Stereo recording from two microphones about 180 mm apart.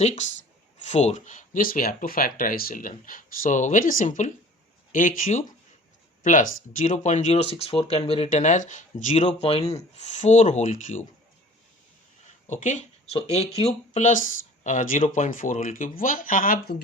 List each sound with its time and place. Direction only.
0.0 s speech: 40° left (ahead or behind)
12.5 s speech: 45° left (ahead or behind)